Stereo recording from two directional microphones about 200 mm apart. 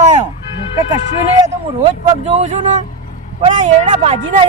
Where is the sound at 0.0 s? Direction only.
35° right (ahead or behind).